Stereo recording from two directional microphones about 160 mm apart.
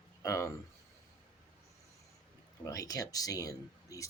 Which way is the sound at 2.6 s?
20° left (ahead or behind).